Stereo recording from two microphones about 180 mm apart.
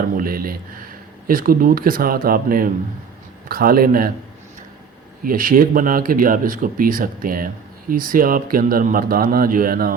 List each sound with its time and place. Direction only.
0.2 s speech: 55° right (ahead or behind)
5.2 s speech: 50° right (ahead or behind)